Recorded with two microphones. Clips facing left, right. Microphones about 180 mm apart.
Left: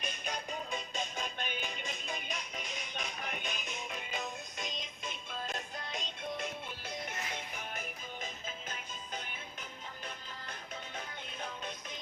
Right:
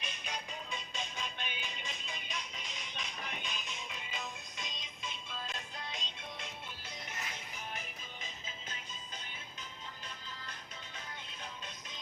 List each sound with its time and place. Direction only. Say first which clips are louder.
0.0 s music: left 4 dB; 45° left (ahead or behind)